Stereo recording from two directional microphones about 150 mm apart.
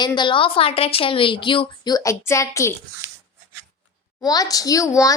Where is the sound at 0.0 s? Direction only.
30° left (ahead or behind).